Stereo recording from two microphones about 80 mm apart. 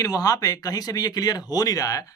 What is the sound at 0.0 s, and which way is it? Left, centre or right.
Speech, left.